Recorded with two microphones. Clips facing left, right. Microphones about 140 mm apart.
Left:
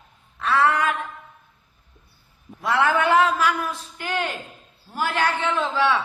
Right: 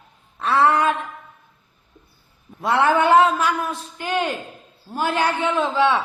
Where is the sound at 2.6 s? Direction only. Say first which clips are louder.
Right 3 dB; 25° right (ahead or behind).